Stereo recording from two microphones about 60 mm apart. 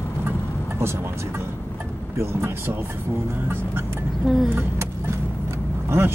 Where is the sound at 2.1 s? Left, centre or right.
Right.